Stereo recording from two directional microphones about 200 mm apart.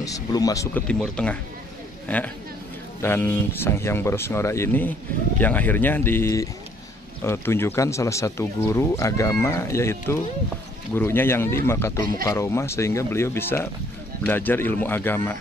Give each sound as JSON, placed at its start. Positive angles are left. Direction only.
{"t": 0.0, "sound": "speech", "side_deg": 15}
{"t": 0.8, "sound": "speech", "side_deg": 5}